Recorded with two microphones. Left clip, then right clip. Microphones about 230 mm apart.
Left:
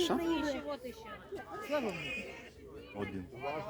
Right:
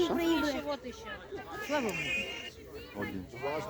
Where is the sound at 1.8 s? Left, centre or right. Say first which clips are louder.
Right 5 dB; right.